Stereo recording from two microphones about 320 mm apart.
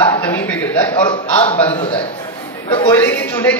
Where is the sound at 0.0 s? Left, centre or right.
Centre.